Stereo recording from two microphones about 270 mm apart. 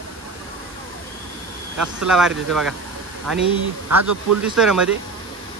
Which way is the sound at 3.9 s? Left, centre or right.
Right.